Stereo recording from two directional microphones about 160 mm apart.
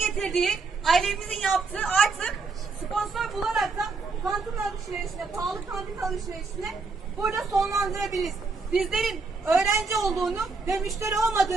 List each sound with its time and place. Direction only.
0.0 s a woman's voice: centre (ahead or behind)
2.9 s a sound: centre (ahead or behind)
3.8 s speech: centre (ahead or behind)
9.5 s a woman's voice: 20° right (ahead or behind)
9.9 s speech: centre (ahead or behind)